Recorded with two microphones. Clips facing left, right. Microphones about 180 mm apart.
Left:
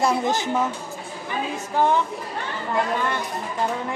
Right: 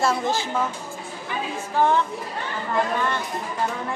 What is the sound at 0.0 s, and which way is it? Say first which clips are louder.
Music: left 1 dB; 20° left (ahead or behind).